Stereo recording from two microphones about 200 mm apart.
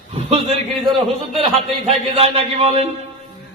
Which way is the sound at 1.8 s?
30° right (ahead or behind).